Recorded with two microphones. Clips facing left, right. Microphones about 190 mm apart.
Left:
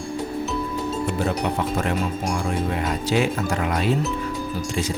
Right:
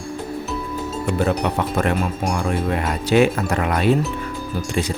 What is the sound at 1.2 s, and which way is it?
Speech, 60° right (ahead or behind).